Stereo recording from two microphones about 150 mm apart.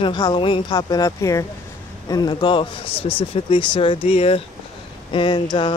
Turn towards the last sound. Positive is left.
turn(degrees=30)  # may be behind; listen again after turning